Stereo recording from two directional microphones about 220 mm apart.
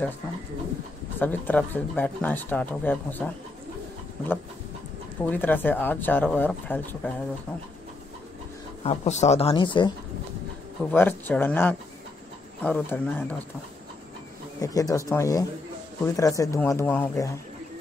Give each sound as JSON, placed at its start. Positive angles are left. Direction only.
{"t": 1.2, "sound": "speech", "side_deg": 10}
{"t": 5.2, "sound": "speech", "side_deg": 5}
{"t": 8.8, "sound": "speech", "side_deg": 30}
{"t": 10.9, "sound": "speech", "side_deg": 10}
{"t": 14.6, "sound": "speech", "side_deg": 15}